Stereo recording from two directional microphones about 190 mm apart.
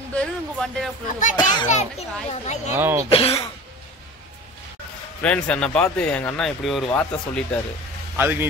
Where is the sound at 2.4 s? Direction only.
35° left (ahead or behind).